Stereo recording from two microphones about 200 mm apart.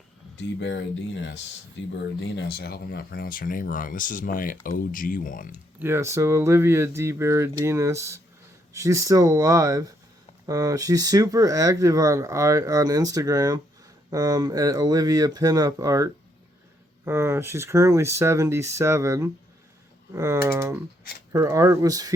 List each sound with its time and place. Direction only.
0.6 s speech: 65° left (ahead or behind)
2.5 s speech: 50° left (ahead or behind)
5.5 s speech: 10° right (ahead or behind)
17.1 s speech: 15° right (ahead or behind)